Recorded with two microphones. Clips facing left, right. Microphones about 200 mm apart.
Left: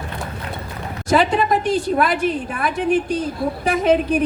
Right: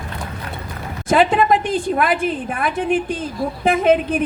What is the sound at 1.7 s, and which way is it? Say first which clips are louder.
A woman's voice: even; 50° right (ahead or behind).